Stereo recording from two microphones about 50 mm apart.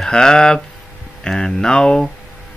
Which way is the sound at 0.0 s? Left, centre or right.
Centre.